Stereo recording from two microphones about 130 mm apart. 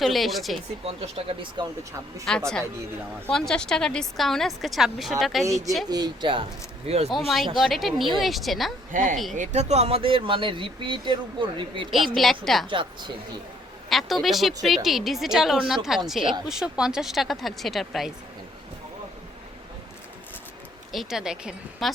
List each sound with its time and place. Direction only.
0.0 s a woman's voice: centre (ahead or behind)
0.9 s speech: 50° right (ahead or behind)
2.3 s a woman's voice: 5° left (ahead or behind)
5.9 s speech: 35° right (ahead or behind)
6.8 s speech: 50° right (ahead or behind)
7.1 s a woman's voice: centre (ahead or behind)
8.9 s speech: 90° right
9.3 s speech: 65° right (ahead or behind); by 11.9 s 40° right (ahead or behind)
11.9 s a woman's voice: centre (ahead or behind)
12.6 s speech: 40° right (ahead or behind)
13.9 s a woman's voice: centre (ahead or behind)
20.9 s a woman's voice: centre (ahead or behind)